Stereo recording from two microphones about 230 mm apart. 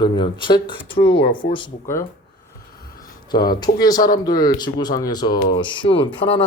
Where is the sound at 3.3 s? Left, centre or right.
Centre.